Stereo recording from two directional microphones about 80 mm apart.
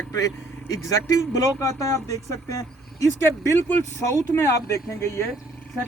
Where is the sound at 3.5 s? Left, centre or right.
Left.